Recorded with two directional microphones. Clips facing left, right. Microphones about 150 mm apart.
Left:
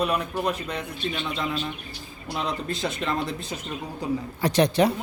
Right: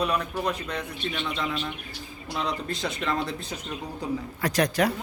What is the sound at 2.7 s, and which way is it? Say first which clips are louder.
Speech: left 2 dB; centre (ahead or behind).